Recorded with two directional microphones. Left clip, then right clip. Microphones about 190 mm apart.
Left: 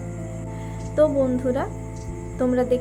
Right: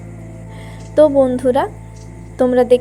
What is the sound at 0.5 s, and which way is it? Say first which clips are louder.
Music: even; 35° right (ahead or behind).